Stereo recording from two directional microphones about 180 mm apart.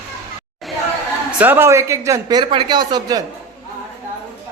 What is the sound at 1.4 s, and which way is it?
Speech, 10° right (ahead or behind).